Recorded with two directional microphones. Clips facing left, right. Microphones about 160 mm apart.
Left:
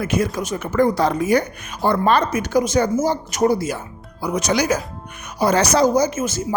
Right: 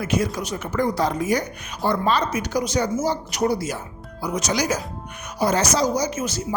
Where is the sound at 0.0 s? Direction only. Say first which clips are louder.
Left 2 dB; 50° left (ahead or behind).